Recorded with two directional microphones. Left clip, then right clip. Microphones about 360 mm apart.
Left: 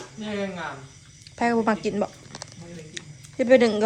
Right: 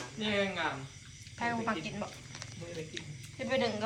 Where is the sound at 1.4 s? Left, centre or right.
Centre.